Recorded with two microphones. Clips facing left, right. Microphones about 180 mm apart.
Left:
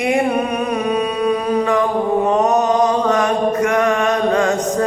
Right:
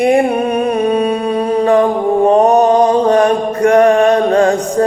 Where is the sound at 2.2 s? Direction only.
30° right (ahead or behind).